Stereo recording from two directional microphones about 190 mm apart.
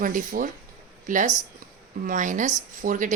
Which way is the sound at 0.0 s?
45° right (ahead or behind).